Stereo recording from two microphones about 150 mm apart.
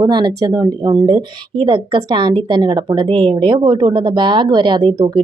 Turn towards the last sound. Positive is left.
turn(degrees=-30)  # may be behind; listen again after turning